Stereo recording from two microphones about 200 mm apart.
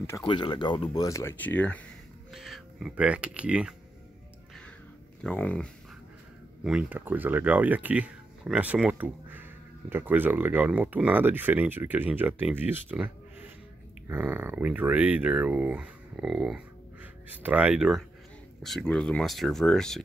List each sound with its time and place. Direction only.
0.2 s speech: 25° left (ahead or behind); by 3.7 s 5° right (ahead or behind)
5.2 s speech: 5° left (ahead or behind)
6.6 s speech: 5° right (ahead or behind)